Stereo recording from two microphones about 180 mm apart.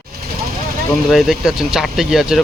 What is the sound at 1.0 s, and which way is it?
Speech, centre (ahead or behind).